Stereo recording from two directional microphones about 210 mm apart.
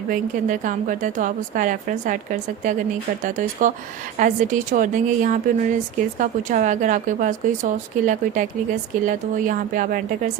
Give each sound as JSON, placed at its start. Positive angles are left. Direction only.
{"t": 0.1, "sound": "a woman's voice", "side_deg": -35}